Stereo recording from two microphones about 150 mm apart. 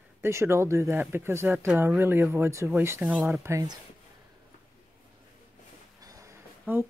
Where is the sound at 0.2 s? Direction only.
20° right (ahead or behind).